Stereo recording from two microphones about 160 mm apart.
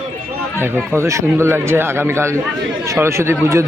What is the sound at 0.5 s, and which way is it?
Speech, 15° right (ahead or behind).